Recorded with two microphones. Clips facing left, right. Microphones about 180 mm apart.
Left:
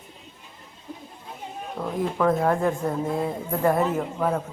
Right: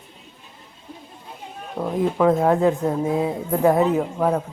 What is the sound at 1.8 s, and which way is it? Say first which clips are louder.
A woman's voice: right 5 dB; 20° right (ahead or behind).